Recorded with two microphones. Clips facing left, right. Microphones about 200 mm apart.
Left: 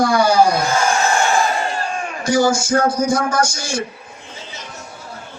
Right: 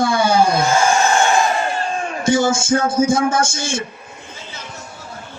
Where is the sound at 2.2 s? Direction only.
25° right (ahead or behind).